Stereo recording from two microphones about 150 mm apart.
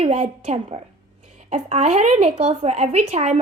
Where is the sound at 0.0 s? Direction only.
45° right (ahead or behind).